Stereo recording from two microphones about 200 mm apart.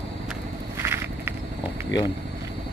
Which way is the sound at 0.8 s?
10° right (ahead or behind).